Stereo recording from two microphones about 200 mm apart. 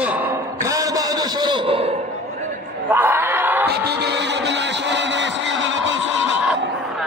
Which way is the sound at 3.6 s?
55° right (ahead or behind).